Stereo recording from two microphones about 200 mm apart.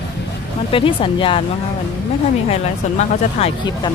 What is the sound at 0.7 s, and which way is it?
Speech, 25° left (ahead or behind).